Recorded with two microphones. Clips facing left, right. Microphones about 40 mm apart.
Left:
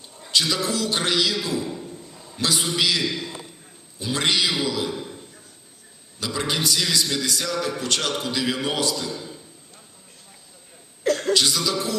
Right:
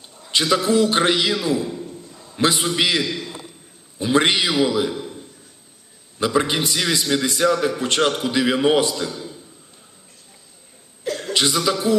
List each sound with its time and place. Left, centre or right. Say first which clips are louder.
0.3 s a man's voice: right 5 dB; right
6.1 s a man's voice: right 6 dB; right
11.0 s a sound: left 5 dB; left
11.3 s a man's voice: right 3 dB; right